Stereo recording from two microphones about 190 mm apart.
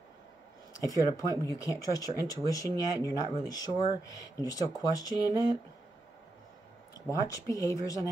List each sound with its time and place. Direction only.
0.7 s speech: 20° left (ahead or behind)
7.1 s speech: 15° left (ahead or behind)